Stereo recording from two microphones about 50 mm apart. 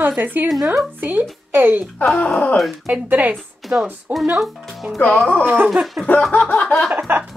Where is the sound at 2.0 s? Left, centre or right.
Left.